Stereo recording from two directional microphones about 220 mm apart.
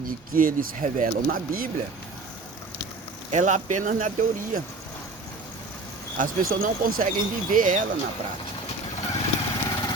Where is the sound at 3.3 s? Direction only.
35° right (ahead or behind).